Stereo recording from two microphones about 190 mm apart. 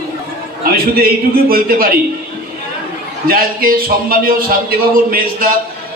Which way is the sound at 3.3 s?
50° right (ahead or behind).